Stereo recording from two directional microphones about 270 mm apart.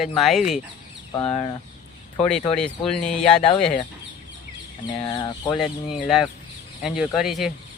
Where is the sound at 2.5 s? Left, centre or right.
Centre.